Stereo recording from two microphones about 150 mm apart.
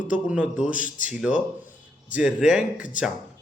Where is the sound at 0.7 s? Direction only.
60° left (ahead or behind).